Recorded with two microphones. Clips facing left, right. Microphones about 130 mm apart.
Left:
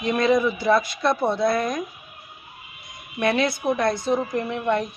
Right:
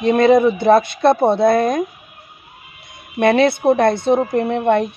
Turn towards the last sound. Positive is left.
turn(degrees=-60)  # may be behind; listen again after turning